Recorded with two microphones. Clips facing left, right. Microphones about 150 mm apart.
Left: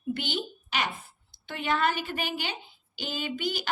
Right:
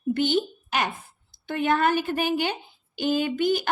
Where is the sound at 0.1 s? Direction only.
45° right (ahead or behind).